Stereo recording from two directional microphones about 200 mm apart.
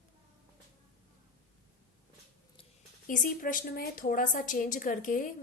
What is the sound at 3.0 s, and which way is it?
A woman's voice, 40° left (ahead or behind).